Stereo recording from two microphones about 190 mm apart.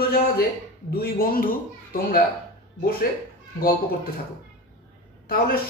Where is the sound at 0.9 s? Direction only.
50° left (ahead or behind).